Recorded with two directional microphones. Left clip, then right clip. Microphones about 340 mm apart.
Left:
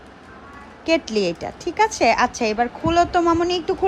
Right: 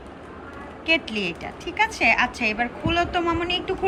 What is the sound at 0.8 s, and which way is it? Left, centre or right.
A woman's voice, centre.